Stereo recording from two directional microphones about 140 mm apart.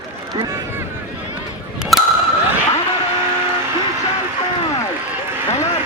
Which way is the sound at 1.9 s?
Centre (ahead or behind).